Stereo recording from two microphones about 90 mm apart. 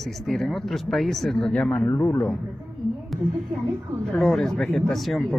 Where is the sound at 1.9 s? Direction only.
20° left (ahead or behind).